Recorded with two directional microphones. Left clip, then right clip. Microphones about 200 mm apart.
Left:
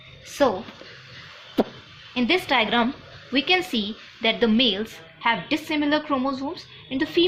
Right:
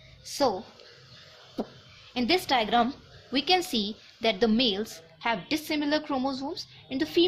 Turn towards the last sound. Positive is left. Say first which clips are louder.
# left 4 dB
turn(degrees=-50)  # may be behind; listen again after turning